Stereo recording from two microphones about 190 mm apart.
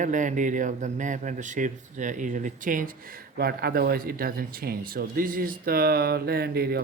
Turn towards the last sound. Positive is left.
turn(degrees=-55)  # may be behind; listen again after turning